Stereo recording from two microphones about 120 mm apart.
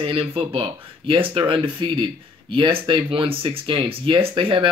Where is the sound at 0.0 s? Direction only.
50° right (ahead or behind).